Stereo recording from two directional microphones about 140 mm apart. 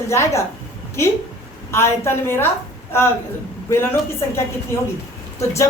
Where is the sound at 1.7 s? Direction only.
20° left (ahead or behind).